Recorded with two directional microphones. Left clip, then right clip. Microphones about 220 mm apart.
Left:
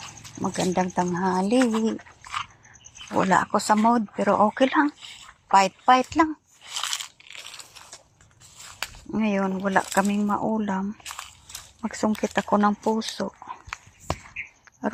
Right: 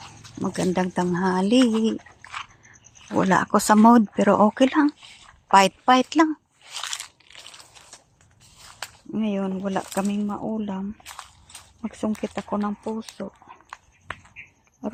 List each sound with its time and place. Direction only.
0.4 s speech: 25° right (ahead or behind)
1.9 s dog: 45° left (ahead or behind)
3.2 s speech: 30° right (ahead or behind)
5.5 s speech: 45° right (ahead or behind)
6.7 s crushing: 50° left (ahead or behind)
9.1 s speech: 10° right (ahead or behind)
10.2 s speech: centre (ahead or behind)
11.0 s a sound: 50° left (ahead or behind)
11.8 s speech: 5° right (ahead or behind)
12.4 s speech: 10° left (ahead or behind)